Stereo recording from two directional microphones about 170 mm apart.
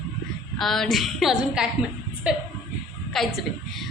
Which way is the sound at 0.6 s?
Centre (ahead or behind).